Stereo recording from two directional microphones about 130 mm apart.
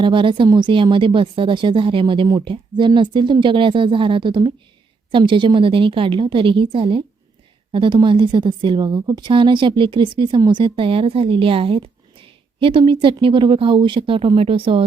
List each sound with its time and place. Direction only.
0.0 s speech: 40° right (ahead or behind)